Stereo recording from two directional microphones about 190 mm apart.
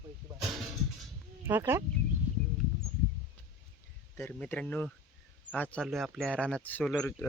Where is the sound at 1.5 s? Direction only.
10° right (ahead or behind).